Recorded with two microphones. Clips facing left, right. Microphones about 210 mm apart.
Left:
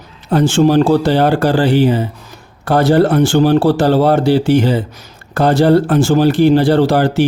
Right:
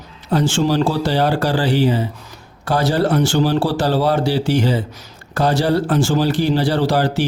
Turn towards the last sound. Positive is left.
turn(degrees=55)  # may be behind; listen again after turning